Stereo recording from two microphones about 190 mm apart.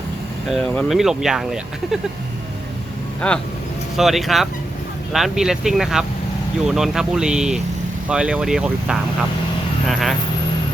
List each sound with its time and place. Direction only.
0.4 s speech: centre (ahead or behind)
3.2 s speech: 5° left (ahead or behind)